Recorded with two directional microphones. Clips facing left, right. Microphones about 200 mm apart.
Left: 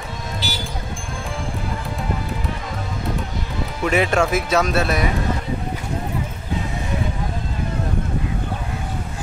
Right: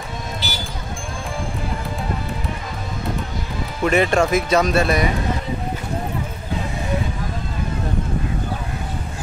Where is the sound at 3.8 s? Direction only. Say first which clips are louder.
Right 2 dB; 5° left (ahead or behind).